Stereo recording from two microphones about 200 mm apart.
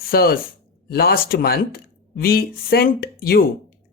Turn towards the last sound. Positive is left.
turn(degrees=50)  # may be behind; listen again after turning